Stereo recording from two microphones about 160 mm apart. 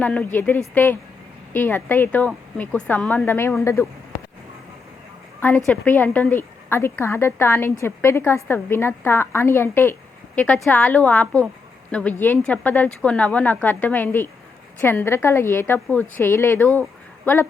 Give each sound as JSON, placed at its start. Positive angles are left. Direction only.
{"t": 0.0, "sound": "speech", "side_deg": 10}
{"t": 5.6, "sound": "speech", "side_deg": 10}